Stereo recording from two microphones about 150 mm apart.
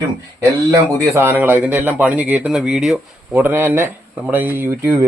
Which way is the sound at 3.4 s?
15° right (ahead or behind).